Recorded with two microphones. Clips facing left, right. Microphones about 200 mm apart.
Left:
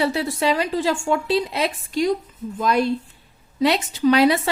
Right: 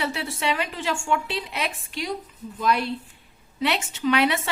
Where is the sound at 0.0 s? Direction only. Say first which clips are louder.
Left 7 dB; 40° left (ahead or behind).